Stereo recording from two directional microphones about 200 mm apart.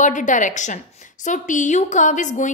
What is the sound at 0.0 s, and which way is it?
A woman's voice, 40° left (ahead or behind).